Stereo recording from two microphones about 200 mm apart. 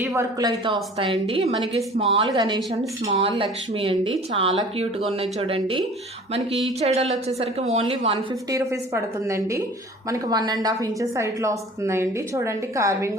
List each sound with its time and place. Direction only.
0.0 s a woman's voice: 15° right (ahead or behind)
0.6 s a woman's voice: 25° right (ahead or behind)
8.4 s a woman's voice: 15° right (ahead or behind)